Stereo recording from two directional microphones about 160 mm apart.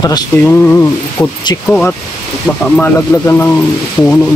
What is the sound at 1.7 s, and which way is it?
Speech, 10° left (ahead or behind).